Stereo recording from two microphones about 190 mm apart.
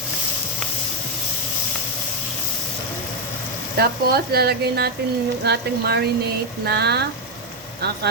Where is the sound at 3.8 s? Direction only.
55° right (ahead or behind).